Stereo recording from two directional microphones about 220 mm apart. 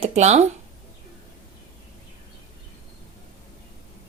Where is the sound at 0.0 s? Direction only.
30° right (ahead or behind).